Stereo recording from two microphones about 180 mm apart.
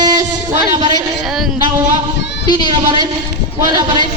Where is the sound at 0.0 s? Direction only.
20° right (ahead or behind).